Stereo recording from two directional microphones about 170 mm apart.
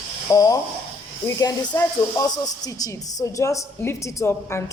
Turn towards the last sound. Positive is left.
turn(degrees=15)  # may be behind; listen again after turning